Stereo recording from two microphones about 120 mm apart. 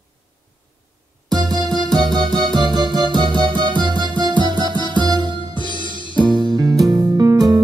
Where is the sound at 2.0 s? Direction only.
35° right (ahead or behind).